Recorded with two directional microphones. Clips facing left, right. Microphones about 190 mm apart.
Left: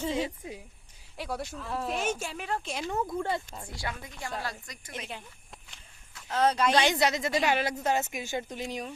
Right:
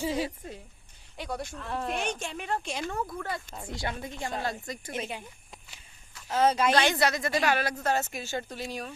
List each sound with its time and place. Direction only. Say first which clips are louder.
0.0 s speech: even; 10° right (ahead or behind)
1.1 s speech: even; 5° left (ahead or behind)
2.9 s speech: left 4 dB; 25° left (ahead or behind)
3.7 s speech: right 5 dB; 25° right (ahead or behind)
5.7 s walk: even; 5° right (ahead or behind)
6.7 s speech: even; 15° left (ahead or behind)